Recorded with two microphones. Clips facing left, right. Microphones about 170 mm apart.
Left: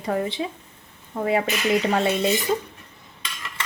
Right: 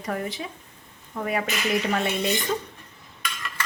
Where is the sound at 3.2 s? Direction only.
20° left (ahead or behind).